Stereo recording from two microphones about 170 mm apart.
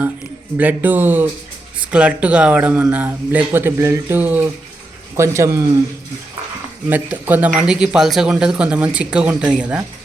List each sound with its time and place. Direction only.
0.5 s speech: 10° right (ahead or behind)
6.9 s speech: 10° right (ahead or behind)